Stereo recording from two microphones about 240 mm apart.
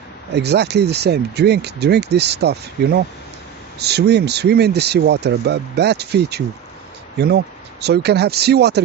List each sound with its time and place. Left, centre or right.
0.3 s speech: right